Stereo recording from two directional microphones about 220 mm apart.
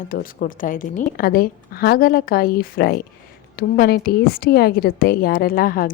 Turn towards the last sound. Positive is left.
turn(degrees=40)  # may be behind; listen again after turning